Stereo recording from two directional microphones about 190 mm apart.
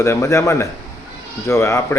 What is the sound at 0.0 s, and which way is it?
Speech, 15° left (ahead or behind).